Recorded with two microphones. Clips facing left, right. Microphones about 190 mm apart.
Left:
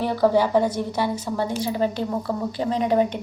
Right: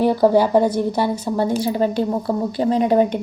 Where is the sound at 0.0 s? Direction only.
40° right (ahead or behind).